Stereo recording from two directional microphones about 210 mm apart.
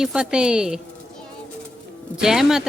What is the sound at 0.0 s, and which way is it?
Speech, 5° right (ahead or behind).